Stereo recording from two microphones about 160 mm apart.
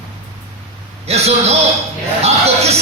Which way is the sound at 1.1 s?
40° right (ahead or behind).